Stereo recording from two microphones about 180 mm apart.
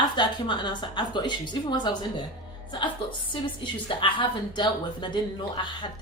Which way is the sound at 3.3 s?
30° left (ahead or behind).